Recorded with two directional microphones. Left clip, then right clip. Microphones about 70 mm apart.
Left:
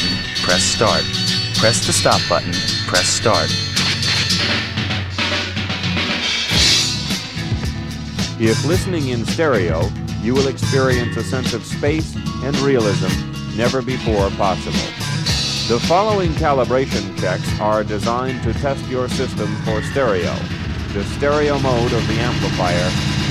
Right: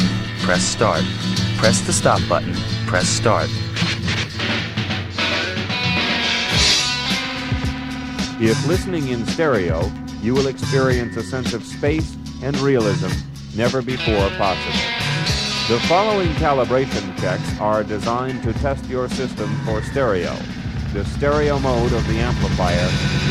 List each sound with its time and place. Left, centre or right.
0.4 s speech: left
3.8 s music: left
8.2 s speech: left